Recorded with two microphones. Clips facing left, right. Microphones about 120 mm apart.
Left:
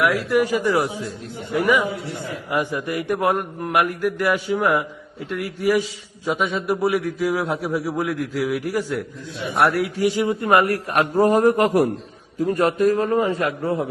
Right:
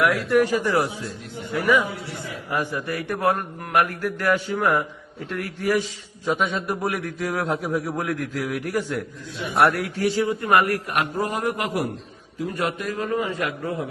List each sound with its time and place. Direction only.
0.0 s a man's voice: centre (ahead or behind)
2.5 s a man's voice: 15° left (ahead or behind)
10.0 s a man's voice: 15° left (ahead or behind); by 13.8 s 30° left (ahead or behind)